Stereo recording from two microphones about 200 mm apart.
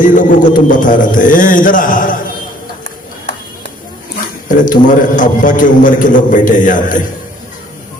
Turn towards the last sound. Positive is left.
turn(degrees=40)  # may be behind; listen again after turning